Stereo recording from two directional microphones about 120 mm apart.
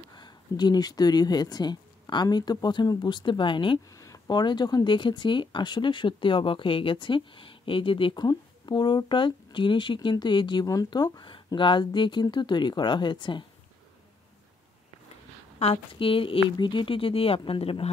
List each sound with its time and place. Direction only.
0.1 s speech: 35° left (ahead or behind)
3.9 s speech: 30° left (ahead or behind)
15.6 s speech: 50° left (ahead or behind)